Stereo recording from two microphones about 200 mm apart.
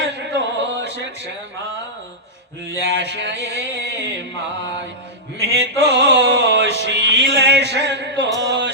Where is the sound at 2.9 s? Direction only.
60° right (ahead or behind).